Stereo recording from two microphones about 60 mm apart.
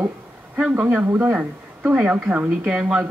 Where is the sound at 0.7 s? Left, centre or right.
Right.